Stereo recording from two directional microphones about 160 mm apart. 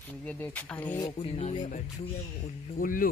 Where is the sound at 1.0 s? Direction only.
25° left (ahead or behind).